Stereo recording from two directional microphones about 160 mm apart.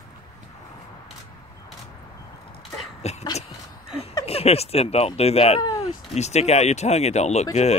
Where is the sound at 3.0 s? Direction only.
40° left (ahead or behind).